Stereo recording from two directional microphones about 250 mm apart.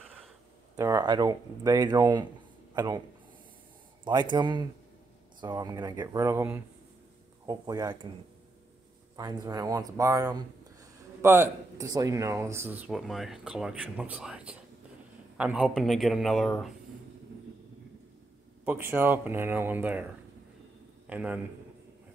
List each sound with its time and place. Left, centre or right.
0.0 s a sound: centre
0.7 s speech: centre
4.0 s speech: centre
9.1 s a man's voice: centre
18.7 s speech: centre
21.1 s a man's voice: centre